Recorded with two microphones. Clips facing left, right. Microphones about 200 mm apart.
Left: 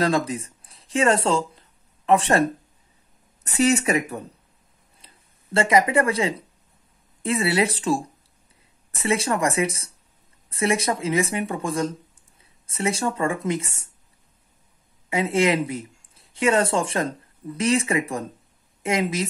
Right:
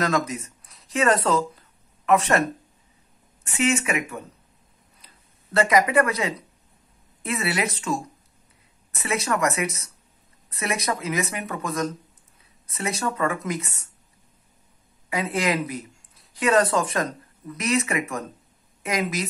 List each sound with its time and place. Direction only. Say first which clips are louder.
0.0 s a woman's voice: left 2 dB; 30° left (ahead or behind)
3.4 s a woman's voice: left 3 dB; 40° left (ahead or behind)
15.0 s a woman's voice: left 4 dB; 25° left (ahead or behind)